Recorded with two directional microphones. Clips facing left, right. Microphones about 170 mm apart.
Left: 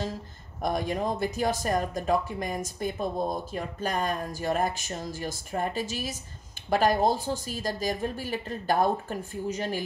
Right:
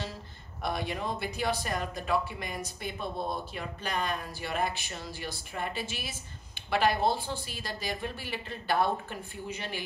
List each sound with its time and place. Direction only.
0.6 s speech: 45° left (ahead or behind)